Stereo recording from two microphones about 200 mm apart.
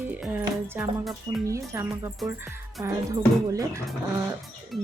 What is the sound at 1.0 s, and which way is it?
Speech, centre (ahead or behind).